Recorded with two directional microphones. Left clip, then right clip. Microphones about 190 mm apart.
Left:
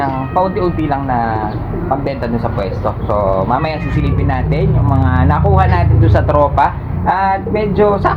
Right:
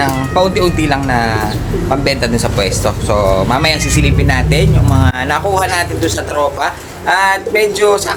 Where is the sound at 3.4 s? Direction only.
35° right (ahead or behind).